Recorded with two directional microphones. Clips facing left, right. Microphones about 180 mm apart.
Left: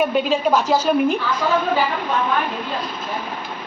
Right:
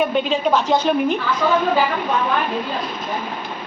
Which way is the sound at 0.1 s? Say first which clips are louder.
Even; 5° left (ahead or behind).